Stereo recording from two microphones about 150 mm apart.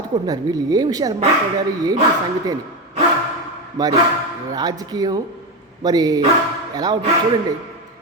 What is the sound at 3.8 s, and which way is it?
Speech, 25° right (ahead or behind).